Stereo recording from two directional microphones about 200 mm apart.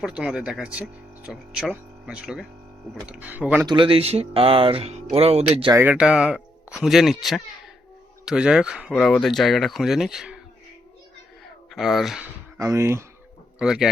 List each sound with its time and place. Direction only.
0.0 s speech: 5° right (ahead or behind)
3.7 s speech: 25° right (ahead or behind)
5.6 s speech: 10° right (ahead or behind)
11.4 s speech: centre (ahead or behind)
12.5 s speech: 15° right (ahead or behind)
13.6 s speech: 5° right (ahead or behind)